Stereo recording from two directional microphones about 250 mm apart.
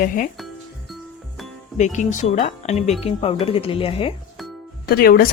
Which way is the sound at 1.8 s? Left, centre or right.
Left.